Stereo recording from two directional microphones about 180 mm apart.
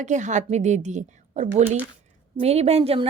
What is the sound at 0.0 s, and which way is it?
A woman's voice, 40° right (ahead or behind).